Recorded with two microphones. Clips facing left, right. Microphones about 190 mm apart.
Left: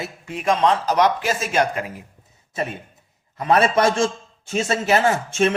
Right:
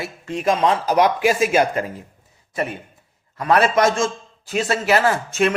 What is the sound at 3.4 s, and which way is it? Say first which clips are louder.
A man's voice: right 1 dB; 25° left (ahead or behind).